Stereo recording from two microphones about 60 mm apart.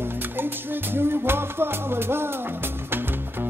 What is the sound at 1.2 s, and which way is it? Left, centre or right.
Music, right.